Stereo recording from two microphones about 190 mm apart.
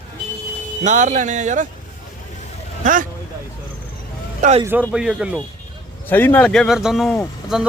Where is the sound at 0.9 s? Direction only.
40° right (ahead or behind).